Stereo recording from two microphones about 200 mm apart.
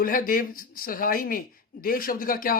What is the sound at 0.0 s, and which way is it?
Speech, 45° left (ahead or behind).